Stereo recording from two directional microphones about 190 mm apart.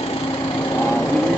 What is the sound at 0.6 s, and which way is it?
Lawn mower, 15° left (ahead or behind).